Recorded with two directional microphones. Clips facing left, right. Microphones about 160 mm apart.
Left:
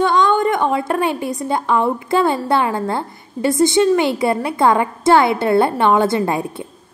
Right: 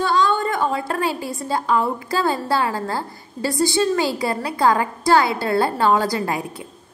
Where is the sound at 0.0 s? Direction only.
20° left (ahead or behind).